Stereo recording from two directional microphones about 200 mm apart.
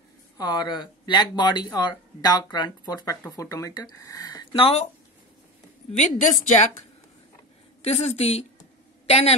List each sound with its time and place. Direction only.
0.4 s speech: 20° left (ahead or behind)
5.9 s a woman's voice: 40° left (ahead or behind)
7.8 s a woman's voice: 30° left (ahead or behind)